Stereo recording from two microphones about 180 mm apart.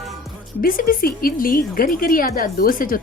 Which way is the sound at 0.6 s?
50° left (ahead or behind).